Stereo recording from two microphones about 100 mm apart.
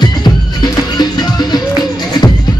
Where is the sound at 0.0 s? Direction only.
45° left (ahead or behind).